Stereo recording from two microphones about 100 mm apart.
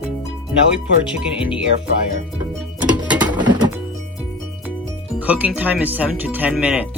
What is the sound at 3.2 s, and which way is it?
Music, 45° right (ahead or behind).